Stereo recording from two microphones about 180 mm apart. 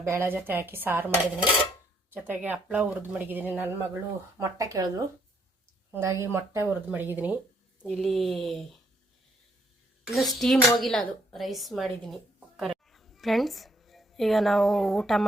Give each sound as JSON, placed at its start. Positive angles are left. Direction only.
{"t": 0.0, "sound": "speech", "side_deg": -15}
{"t": 7.9, "sound": "speech", "side_deg": 0}
{"t": 10.0, "sound": "speech", "side_deg": 0}